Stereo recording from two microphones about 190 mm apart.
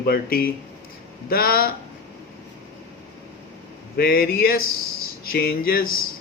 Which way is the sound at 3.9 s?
50° left (ahead or behind).